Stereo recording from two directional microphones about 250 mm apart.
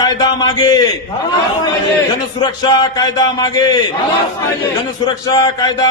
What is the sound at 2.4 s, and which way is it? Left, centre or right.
A man's voice, centre.